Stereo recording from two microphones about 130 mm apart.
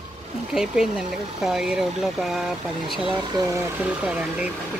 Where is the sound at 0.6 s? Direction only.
5° right (ahead or behind).